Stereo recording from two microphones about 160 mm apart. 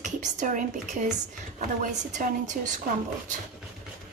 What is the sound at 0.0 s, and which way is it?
A woman's voice, 50° right (ahead or behind).